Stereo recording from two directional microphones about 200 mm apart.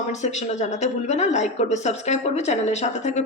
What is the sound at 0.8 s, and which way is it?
A woman's voice, 35° left (ahead or behind).